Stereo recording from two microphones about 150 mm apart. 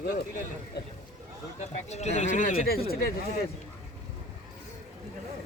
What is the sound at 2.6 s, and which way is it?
Speech, 90° left.